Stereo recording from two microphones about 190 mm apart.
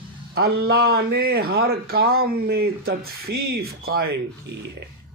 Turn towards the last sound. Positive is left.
turn(degrees=-55)  # may be behind; listen again after turning